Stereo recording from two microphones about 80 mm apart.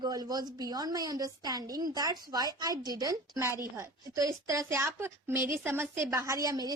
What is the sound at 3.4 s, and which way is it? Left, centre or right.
Speech, right.